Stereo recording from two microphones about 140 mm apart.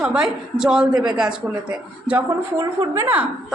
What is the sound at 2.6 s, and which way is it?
Speech, 20° right (ahead or behind).